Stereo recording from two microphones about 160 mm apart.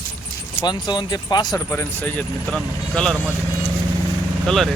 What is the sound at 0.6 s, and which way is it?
Speech, 25° left (ahead or behind).